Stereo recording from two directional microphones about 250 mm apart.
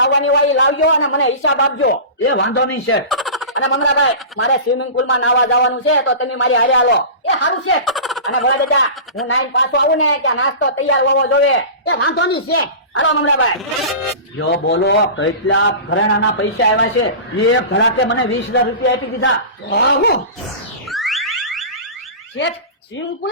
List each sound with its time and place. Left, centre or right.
0.0 s a man's voice: left
3.1 s fowl: centre
4.0 s a man's voice: left
7.9 s turkey: centre
8.3 s a man's voice: left
20.9 s car alarm: centre